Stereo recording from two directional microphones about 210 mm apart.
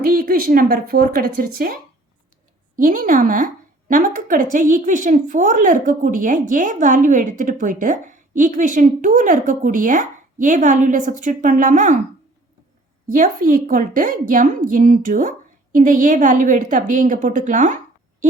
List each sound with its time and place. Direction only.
0.0 s a woman's voice: 45° right (ahead or behind)
13.1 s a woman's voice: 40° right (ahead or behind)